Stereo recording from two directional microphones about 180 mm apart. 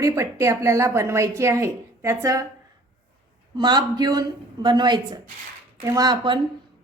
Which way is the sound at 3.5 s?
25° right (ahead or behind).